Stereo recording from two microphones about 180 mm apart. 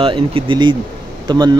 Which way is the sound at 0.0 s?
30° right (ahead or behind).